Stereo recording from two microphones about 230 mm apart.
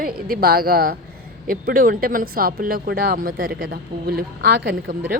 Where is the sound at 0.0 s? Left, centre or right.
Right.